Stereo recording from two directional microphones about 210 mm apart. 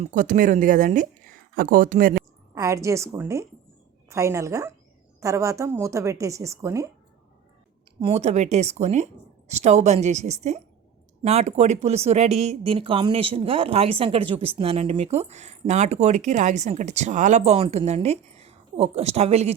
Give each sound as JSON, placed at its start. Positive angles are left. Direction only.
{"t": 0.0, "sound": "speech", "side_deg": -35}
{"t": 2.6, "sound": "speech", "side_deg": -15}
{"t": 8.0, "sound": "a woman's voice", "side_deg": -30}